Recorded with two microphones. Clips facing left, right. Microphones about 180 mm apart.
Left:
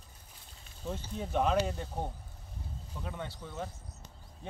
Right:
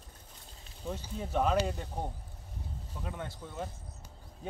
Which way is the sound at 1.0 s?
5° right (ahead or behind).